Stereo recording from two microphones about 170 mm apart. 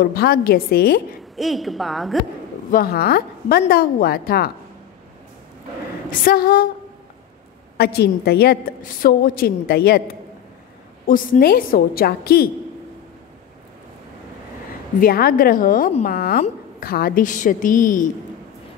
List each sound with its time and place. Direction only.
0.0 s a woman's voice: 65° left (ahead or behind)
1.3 s a woman's voice: centre (ahead or behind)
2.7 s a woman's voice: 60° left (ahead or behind)
6.0 s a woman's voice: 60° left (ahead or behind)
7.7 s a woman's voice: 70° left (ahead or behind)
11.1 s a woman's voice: 55° left (ahead or behind)
15.0 s a woman's voice: 60° left (ahead or behind)